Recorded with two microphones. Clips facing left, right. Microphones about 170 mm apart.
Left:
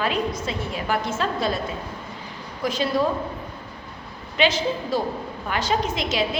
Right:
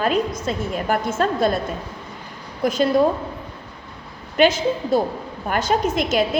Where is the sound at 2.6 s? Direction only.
45° right (ahead or behind).